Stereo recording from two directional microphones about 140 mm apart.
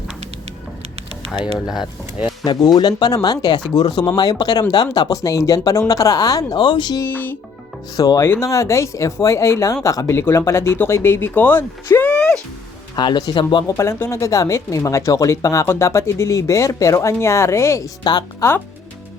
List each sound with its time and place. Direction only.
1.6 s speech: 5° right (ahead or behind)
2.4 s speech: 30° left (ahead or behind)
7.0 s speech: 15° left (ahead or behind)
7.9 s speech: 25° left (ahead or behind); by 12.4 s 10° left (ahead or behind)
13.0 s speech: 30° left (ahead or behind)